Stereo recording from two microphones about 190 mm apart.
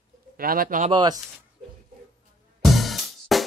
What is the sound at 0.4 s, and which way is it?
Speech, 50° right (ahead or behind).